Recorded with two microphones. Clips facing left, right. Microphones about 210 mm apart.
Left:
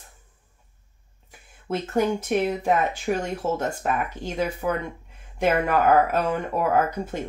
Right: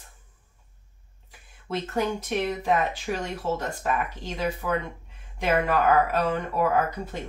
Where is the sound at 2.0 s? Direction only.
50° left (ahead or behind).